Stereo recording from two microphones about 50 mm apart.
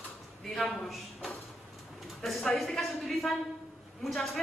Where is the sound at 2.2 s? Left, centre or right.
Centre.